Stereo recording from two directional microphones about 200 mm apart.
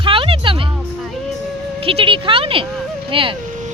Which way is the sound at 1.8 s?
25° right (ahead or behind).